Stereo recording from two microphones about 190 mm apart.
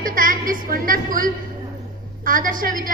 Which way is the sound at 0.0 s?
45° right (ahead or behind).